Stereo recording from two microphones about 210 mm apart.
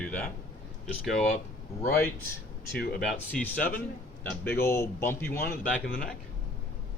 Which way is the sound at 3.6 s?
40° left (ahead or behind).